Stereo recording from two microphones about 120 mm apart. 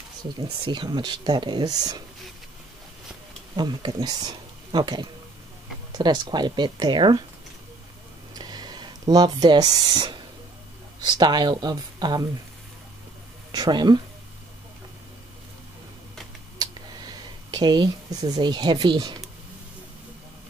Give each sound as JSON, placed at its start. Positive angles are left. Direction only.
{"t": 0.2, "sound": "speech", "side_deg": -40}
{"t": 3.5, "sound": "speech", "side_deg": -40}
{"t": 8.4, "sound": "a sound", "side_deg": -35}
{"t": 11.0, "sound": "speech", "side_deg": -35}
{"t": 13.5, "sound": "speech", "side_deg": -35}
{"t": 16.5, "sound": "a sound", "side_deg": -35}